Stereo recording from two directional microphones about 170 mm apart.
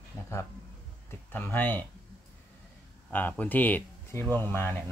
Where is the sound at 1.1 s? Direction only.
10° left (ahead or behind).